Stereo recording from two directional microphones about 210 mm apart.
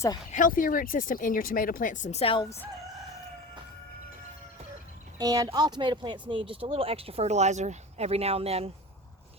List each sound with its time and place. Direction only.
0.3 s speech: 40° left (ahead or behind)
5.1 s speech: 15° right (ahead or behind)